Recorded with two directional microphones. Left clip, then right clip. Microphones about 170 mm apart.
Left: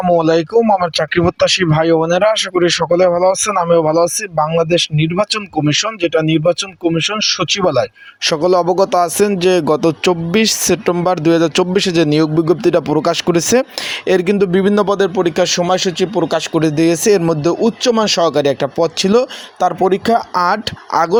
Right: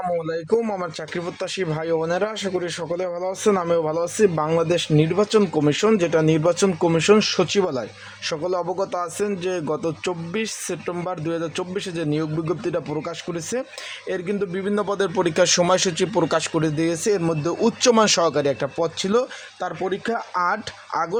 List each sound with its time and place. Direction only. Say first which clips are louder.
0.2 s speech: left 10 dB; 50° left (ahead or behind); by 17.6 s 30° left (ahead or behind)
17.6 s speech: left 3 dB; 10° left (ahead or behind); by 21.2 s 30° left (ahead or behind)